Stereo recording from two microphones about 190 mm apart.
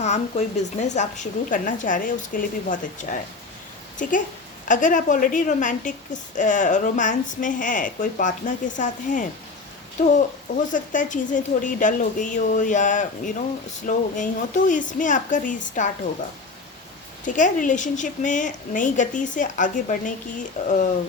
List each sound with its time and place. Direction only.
0.0 s a woman's voice: 35° left (ahead or behind)
17.2 s a woman's voice: 40° left (ahead or behind)